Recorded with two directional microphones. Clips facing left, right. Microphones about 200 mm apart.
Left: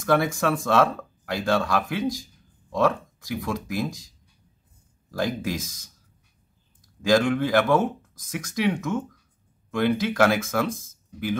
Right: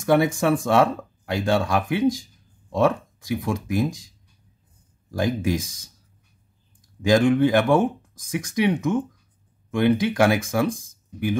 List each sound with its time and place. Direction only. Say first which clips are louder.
0.0 s speech: right 3 dB; 20° right (ahead or behind)
5.1 s speech: right 4 dB; 20° right (ahead or behind)
7.0 s speech: right 3 dB; 20° right (ahead or behind)